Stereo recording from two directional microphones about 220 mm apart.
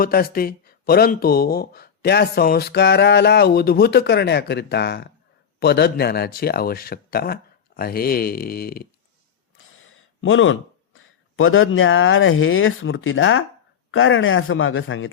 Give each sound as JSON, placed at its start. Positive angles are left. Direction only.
{"t": 0.0, "sound": "speech", "side_deg": 40}
{"t": 9.6, "sound": "speech", "side_deg": 65}